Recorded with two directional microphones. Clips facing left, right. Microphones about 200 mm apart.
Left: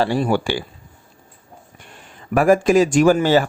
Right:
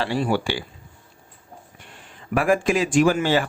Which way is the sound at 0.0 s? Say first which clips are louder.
Left 4 dB; 45° left (ahead or behind).